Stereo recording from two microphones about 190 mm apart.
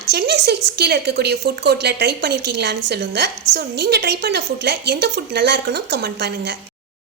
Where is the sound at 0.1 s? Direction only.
60° right (ahead or behind).